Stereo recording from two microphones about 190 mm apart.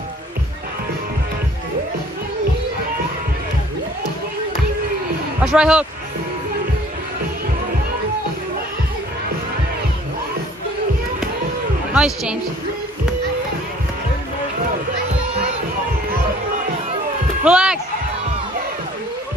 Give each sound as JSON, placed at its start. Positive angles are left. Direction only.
{"t": 5.4, "sound": "a woman's voice", "side_deg": -5}
{"t": 11.9, "sound": "a woman's voice", "side_deg": -5}
{"t": 17.5, "sound": "a sound", "side_deg": -5}